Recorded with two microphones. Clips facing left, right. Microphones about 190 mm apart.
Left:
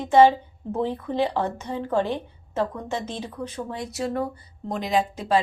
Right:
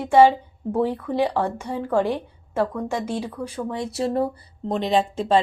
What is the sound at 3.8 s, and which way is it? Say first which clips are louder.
Speech: right 4 dB; 30° right (ahead or behind).